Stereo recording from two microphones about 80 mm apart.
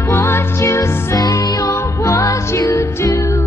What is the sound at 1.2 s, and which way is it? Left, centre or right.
Music, left.